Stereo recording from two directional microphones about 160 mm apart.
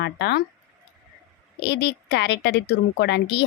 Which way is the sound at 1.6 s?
90° left.